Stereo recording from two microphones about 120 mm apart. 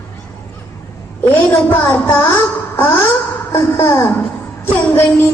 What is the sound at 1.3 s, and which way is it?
Speech, 15° left (ahead or behind).